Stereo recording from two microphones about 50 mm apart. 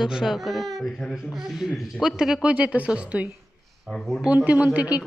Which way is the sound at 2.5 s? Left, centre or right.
Right.